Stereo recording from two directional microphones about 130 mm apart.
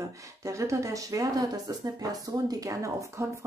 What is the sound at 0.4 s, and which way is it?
Speech, 25° right (ahead or behind).